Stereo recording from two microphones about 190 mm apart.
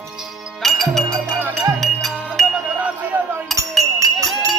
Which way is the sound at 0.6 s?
Centre (ahead or behind).